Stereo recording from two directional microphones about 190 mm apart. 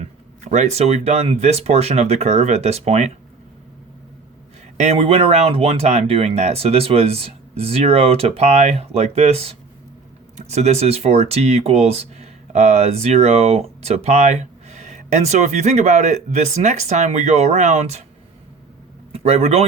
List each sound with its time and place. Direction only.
0.0 s speech: 40° right (ahead or behind)
4.8 s speech: 35° right (ahead or behind)
19.1 s a man's voice: 35° right (ahead or behind)